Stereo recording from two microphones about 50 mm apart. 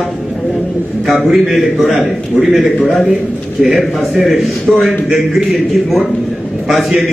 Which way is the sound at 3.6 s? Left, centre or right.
Centre.